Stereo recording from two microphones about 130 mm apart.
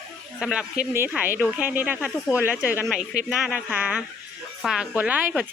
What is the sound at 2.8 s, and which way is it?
Speech, 5° right (ahead or behind).